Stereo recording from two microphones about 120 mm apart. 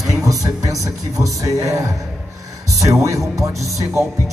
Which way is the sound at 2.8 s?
25° right (ahead or behind).